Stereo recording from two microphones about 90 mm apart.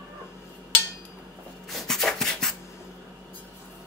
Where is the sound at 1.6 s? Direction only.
Centre (ahead or behind).